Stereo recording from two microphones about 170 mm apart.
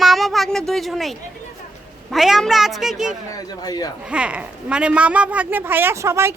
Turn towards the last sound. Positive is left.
turn(degrees=-15)  # may be behind; listen again after turning